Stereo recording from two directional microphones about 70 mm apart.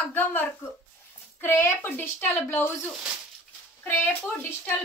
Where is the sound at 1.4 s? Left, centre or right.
Left.